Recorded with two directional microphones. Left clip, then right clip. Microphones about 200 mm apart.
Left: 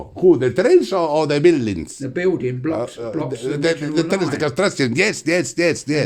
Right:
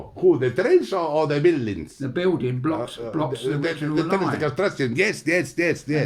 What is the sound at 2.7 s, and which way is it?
Speech, 50° left (ahead or behind).